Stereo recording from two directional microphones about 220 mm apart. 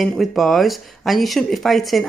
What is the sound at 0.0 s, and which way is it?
Speech, centre (ahead or behind).